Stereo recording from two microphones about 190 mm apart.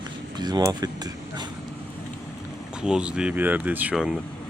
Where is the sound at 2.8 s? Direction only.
5° right (ahead or behind).